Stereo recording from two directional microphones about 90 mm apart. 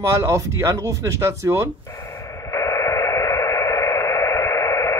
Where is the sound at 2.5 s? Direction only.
35° left (ahead or behind).